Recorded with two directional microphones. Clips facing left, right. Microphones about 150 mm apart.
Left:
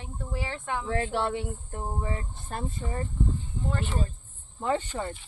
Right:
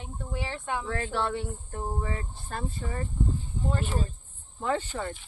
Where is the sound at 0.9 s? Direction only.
25° left (ahead or behind).